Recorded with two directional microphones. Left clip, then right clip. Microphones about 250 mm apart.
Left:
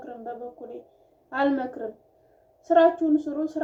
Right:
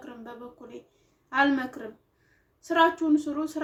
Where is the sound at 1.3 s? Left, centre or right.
Right.